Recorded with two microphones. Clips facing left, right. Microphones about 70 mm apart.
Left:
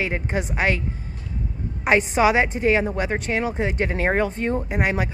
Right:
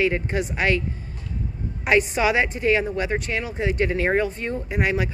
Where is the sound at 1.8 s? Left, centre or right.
Left.